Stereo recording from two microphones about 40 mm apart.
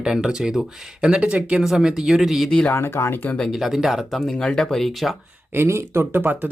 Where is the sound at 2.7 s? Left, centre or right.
Left.